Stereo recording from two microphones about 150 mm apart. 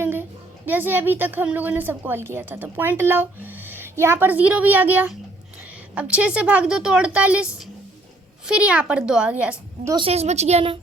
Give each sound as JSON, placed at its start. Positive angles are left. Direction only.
{"t": 0.0, "sound": "a woman's voice", "side_deg": -15}
{"t": 10.0, "sound": "a woman's voice", "side_deg": -45}